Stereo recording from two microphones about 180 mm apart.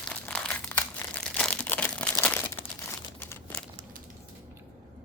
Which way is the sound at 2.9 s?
15° left (ahead or behind).